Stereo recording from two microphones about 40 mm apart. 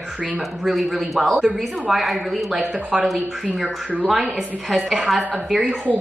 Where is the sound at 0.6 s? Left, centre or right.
Centre.